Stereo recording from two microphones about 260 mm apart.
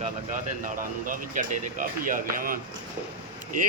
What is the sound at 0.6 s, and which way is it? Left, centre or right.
Speech, right.